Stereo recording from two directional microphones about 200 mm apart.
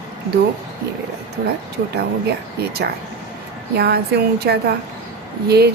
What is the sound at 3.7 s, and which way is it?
A woman's voice, 50° right (ahead or behind).